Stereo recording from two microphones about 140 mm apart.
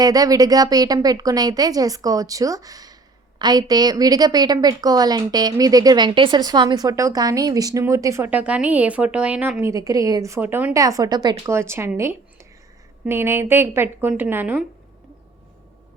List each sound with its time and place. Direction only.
0.0 s speech: 25° right (ahead or behind)
11.9 s a sound: 20° right (ahead or behind)
13.1 s a woman's voice: 15° right (ahead or behind)